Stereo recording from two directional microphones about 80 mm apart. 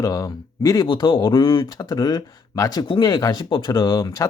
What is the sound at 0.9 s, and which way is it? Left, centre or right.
Speech, left.